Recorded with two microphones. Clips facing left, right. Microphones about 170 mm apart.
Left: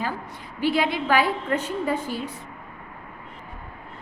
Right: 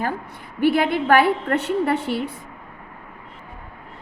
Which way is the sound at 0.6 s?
55° right (ahead or behind).